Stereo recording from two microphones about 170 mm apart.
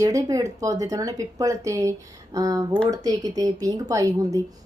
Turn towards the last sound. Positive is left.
turn(degrees=-20)  # may be behind; listen again after turning